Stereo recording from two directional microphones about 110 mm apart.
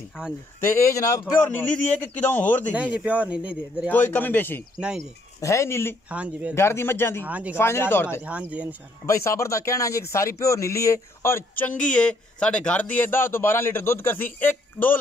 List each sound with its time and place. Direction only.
0.7 s speech: 25° left (ahead or behind)
1.4 s a man's voice: 15° left (ahead or behind)
2.9 s speech: 10° right (ahead or behind)
3.9 s a man's voice: 15° left (ahead or behind)
4.7 s speech: 5° right (ahead or behind)
5.4 s speech: 25° left (ahead or behind)
6.0 s speech: 10° right (ahead or behind)
6.5 s speech: 25° left (ahead or behind)
7.2 s speech: 15° right (ahead or behind)
7.5 s speech: 20° left (ahead or behind)
8.2 s speech: 10° right (ahead or behind)
9.0 s speech: 25° left (ahead or behind)